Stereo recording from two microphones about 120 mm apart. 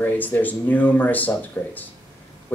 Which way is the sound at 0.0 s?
15° left (ahead or behind).